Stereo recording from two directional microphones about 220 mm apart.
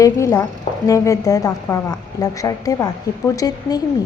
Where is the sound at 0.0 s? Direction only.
15° left (ahead or behind).